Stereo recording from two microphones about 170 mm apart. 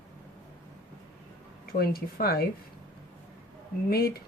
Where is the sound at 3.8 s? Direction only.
60° left (ahead or behind).